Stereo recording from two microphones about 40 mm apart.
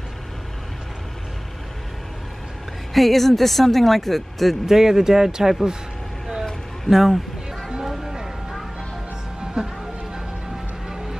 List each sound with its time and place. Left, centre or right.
2.9 s speech: centre
4.6 s speech: centre
6.9 s speech: centre
7.8 s a sound: centre
9.4 s music: right